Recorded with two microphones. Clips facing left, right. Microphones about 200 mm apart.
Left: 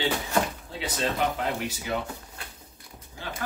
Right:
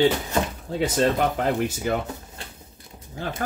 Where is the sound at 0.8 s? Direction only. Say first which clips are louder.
Right 7 dB; 50° right (ahead or behind).